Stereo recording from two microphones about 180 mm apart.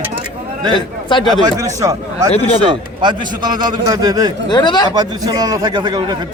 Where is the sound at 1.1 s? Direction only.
25° left (ahead or behind).